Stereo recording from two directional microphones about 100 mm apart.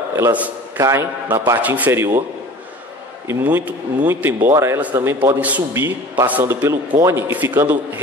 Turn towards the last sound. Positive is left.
turn(degrees=-20)  # may be behind; listen again after turning